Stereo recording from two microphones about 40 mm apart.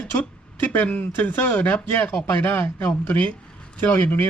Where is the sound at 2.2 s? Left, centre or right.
Left.